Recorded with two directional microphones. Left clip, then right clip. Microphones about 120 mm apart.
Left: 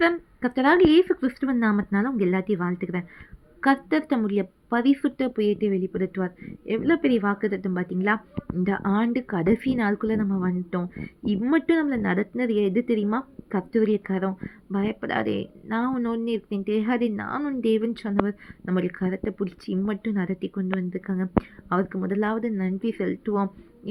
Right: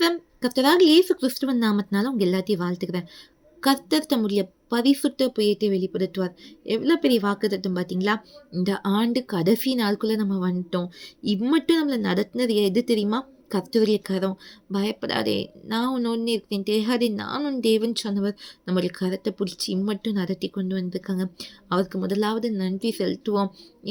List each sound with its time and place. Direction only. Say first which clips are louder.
0.0 s speech: even; 30° right (ahead or behind)